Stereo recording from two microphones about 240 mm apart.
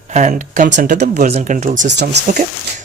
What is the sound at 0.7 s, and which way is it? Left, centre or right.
Speech, right.